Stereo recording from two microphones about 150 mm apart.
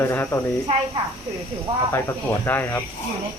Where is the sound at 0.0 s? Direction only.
15° left (ahead or behind).